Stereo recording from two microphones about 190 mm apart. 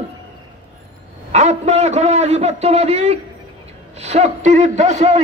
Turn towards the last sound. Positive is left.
turn(degrees=-40)  # may be behind; listen again after turning